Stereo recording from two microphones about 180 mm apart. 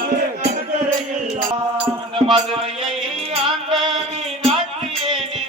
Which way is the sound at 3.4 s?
Centre (ahead or behind).